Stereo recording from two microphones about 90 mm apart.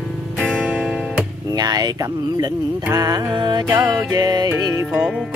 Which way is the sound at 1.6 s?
45° right (ahead or behind).